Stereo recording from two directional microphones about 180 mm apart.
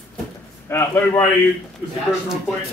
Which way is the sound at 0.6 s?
15° left (ahead or behind).